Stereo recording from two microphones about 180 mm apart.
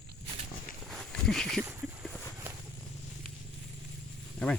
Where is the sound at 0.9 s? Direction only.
Centre (ahead or behind).